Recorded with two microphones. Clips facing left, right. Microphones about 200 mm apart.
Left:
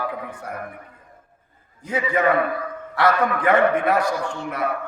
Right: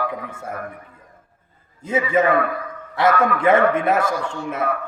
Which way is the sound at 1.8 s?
25° right (ahead or behind).